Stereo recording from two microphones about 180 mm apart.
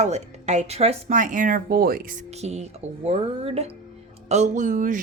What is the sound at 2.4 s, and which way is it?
Speech, 40° right (ahead or behind).